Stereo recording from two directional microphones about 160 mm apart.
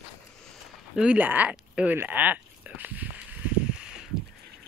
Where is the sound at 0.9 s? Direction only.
5° right (ahead or behind).